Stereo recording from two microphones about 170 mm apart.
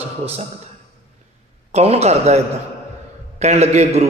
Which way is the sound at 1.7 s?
40° right (ahead or behind).